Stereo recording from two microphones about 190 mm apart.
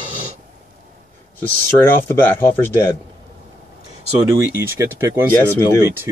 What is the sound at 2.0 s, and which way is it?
Speech, 10° left (ahead or behind).